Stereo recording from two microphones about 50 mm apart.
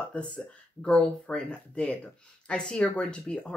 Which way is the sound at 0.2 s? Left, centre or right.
Left.